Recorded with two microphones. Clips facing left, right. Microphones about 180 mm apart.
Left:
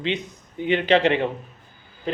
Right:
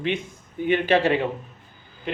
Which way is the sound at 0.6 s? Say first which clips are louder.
Left 1 dB; 20° left (ahead or behind).